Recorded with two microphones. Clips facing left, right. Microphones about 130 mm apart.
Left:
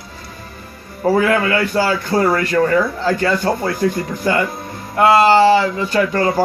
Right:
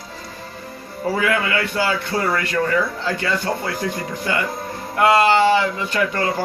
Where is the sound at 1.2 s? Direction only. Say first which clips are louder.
Left 4 dB; 40° left (ahead or behind).